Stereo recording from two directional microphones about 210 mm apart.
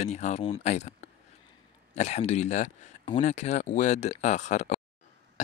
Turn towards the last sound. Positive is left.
turn(degrees=35)  # may be behind; listen again after turning